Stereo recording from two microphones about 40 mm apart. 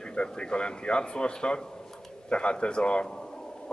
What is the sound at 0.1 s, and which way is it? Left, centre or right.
A man's voice, left.